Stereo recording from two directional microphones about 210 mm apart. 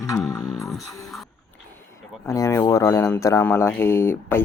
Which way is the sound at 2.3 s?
15° left (ahead or behind).